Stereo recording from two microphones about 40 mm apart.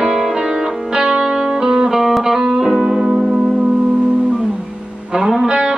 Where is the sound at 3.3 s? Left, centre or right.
Right.